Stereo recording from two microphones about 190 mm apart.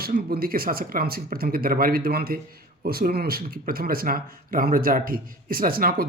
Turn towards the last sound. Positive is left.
turn(degrees=-50)  # may be behind; listen again after turning